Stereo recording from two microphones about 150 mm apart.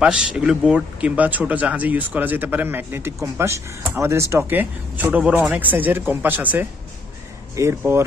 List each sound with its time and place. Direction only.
0.0 s speech: 5° right (ahead or behind)